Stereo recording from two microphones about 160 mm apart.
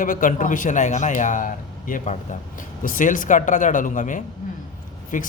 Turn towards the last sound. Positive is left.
turn(degrees=55)  # may be behind; listen again after turning